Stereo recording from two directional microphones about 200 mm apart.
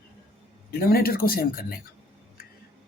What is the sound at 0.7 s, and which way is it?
Speech, 50° left (ahead or behind).